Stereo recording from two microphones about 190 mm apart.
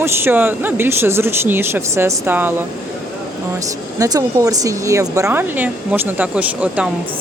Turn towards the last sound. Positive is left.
turn(degrees=-5)  # may be behind; listen again after turning